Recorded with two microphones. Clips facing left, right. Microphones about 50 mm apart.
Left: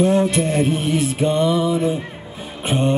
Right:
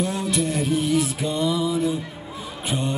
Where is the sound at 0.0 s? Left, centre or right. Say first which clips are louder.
Left 8 dB; left.